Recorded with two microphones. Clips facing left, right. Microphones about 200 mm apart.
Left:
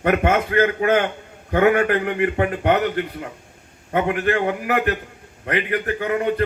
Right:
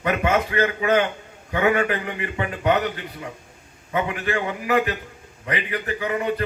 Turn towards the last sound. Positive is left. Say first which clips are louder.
# left 3 dB
turn(degrees=55)  # may be behind; listen again after turning